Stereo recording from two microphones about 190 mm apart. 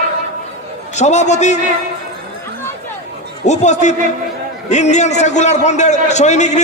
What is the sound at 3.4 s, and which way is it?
A man's voice, 40° left (ahead or behind).